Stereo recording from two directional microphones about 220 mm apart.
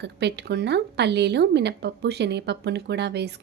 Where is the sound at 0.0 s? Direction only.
50° right (ahead or behind).